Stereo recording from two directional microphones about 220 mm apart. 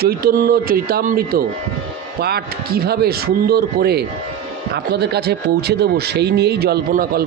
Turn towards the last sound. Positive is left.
turn(degrees=-40)  # may be behind; listen again after turning